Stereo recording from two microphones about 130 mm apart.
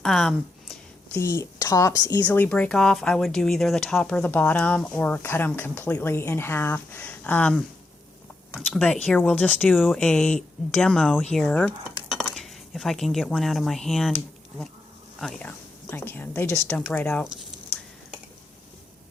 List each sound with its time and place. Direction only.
0.0 s a sound: 5° left (ahead or behind)
1.1 s a woman's voice: 20° left (ahead or behind)
2.2 s speech: 10° left (ahead or behind)
9.7 s speech: 5° right (ahead or behind)
10.0 s speech: 10° left (ahead or behind)
15.2 s speech: 5° left (ahead or behind)
15.4 s a woman's voice: 15° left (ahead or behind)